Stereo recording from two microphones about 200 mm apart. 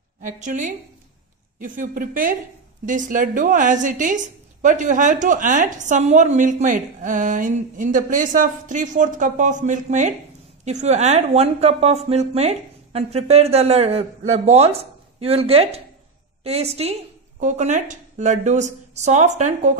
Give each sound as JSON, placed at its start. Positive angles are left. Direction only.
{"t": 0.2, "sound": "a woman's voice", "side_deg": -40}